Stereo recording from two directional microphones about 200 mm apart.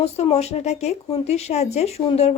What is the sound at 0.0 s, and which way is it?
Speech, 30° left (ahead or behind).